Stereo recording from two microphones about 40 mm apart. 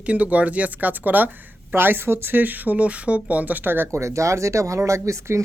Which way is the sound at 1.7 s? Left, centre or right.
Right.